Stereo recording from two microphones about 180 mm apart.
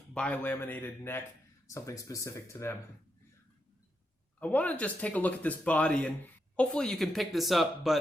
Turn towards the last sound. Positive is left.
turn(degrees=0)  # may be behind; listen again after turning